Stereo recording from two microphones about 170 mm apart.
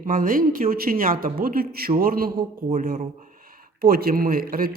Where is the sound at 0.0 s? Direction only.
55° right (ahead or behind).